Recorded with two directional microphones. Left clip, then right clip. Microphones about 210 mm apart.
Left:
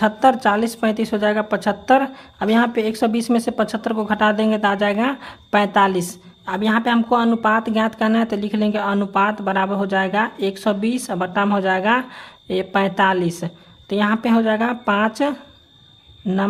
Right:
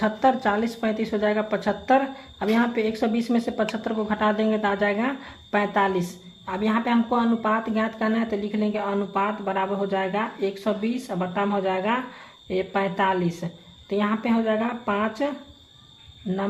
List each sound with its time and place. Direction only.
0.0 s speech: 30° left (ahead or behind)